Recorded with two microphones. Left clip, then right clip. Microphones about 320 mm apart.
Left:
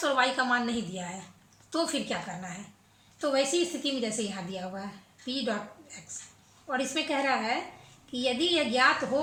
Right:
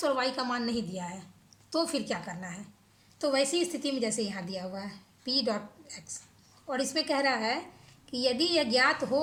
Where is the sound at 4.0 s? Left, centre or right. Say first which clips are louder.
Right 1 dB; centre.